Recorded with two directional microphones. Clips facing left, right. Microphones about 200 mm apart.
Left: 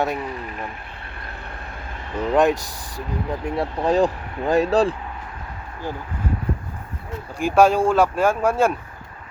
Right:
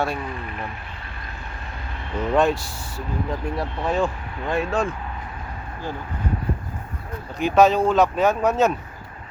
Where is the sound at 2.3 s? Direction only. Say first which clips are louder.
Left 2 dB; 15° left (ahead or behind).